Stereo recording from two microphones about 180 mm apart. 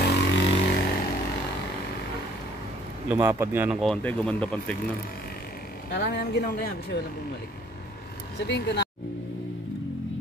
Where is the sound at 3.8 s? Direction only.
5° left (ahead or behind).